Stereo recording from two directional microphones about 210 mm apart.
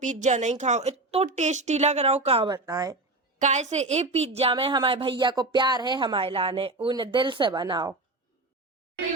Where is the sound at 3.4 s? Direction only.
35° right (ahead or behind).